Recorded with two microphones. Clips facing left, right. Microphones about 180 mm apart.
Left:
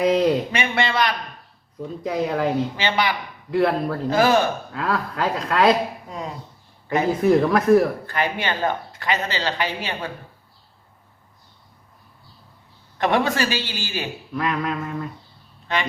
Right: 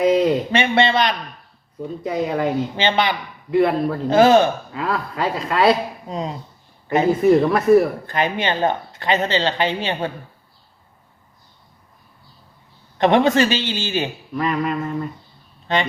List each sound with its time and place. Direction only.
0.0 s a man's voice: centre (ahead or behind)
0.5 s speech: 25° right (ahead or behind)
1.8 s speech: centre (ahead or behind)
2.7 s speech: 25° right (ahead or behind)
3.5 s speech: centre (ahead or behind)
4.1 s speech: 25° right (ahead or behind)
4.7 s speech: centre (ahead or behind)
6.1 s speech: 20° right (ahead or behind)
7.2 s speech: centre (ahead or behind)
8.0 s speech: 20° right (ahead or behind)
13.0 s speech: 25° right (ahead or behind)
14.3 s speech: centre (ahead or behind)
15.6 s speech: 25° right (ahead or behind)